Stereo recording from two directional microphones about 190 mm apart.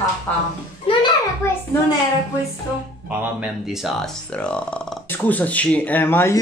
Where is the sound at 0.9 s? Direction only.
30° left (ahead or behind).